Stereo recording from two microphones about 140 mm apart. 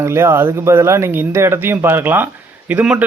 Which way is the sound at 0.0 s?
20° right (ahead or behind).